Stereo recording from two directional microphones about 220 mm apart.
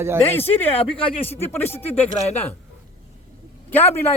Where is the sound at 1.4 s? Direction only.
10° left (ahead or behind).